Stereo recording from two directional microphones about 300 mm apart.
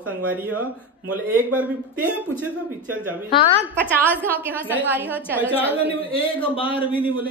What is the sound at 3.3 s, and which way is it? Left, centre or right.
Speech, centre.